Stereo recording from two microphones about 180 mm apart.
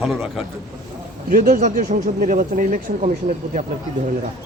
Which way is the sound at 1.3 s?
50° right (ahead or behind).